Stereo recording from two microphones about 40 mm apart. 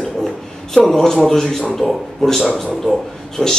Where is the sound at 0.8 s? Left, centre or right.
Centre.